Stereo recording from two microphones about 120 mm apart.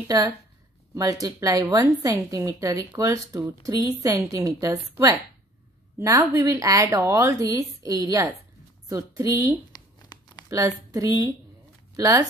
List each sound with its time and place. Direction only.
0.1 s a woman's voice: 30° right (ahead or behind)
10.5 s a woman's voice: 30° right (ahead or behind)